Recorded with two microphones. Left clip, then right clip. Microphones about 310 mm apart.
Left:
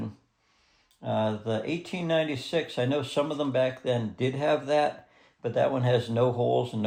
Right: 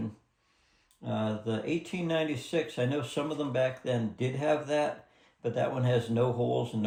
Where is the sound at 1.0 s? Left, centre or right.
Left.